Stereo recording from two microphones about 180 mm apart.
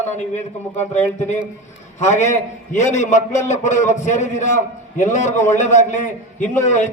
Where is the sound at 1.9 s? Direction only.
40° left (ahead or behind).